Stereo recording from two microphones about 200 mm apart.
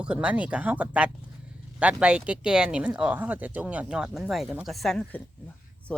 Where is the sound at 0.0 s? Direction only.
5° right (ahead or behind).